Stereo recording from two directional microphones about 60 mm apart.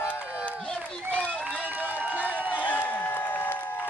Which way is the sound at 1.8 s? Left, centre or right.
Right.